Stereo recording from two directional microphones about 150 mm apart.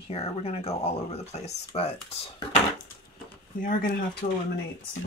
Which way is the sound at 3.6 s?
65° left (ahead or behind).